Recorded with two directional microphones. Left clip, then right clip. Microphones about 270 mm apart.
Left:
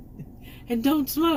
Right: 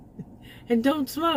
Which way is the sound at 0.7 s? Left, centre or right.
Right.